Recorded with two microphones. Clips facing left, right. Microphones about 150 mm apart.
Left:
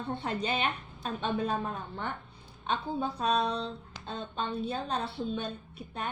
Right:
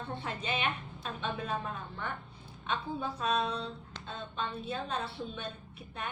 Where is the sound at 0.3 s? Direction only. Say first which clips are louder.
Left 3 dB; 35° left (ahead or behind).